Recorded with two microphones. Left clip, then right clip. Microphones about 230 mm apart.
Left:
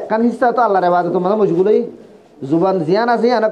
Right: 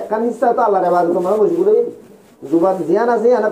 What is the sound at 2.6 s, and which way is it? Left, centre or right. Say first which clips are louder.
Speech: even; left.